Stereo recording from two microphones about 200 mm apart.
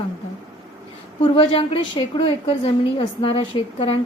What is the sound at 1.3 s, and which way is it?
A woman's voice, 25° left (ahead or behind).